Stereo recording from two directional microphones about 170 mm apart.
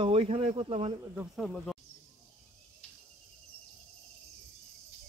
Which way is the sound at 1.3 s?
Centre (ahead or behind).